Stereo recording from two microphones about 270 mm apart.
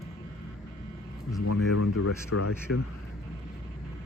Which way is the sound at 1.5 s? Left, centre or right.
Left.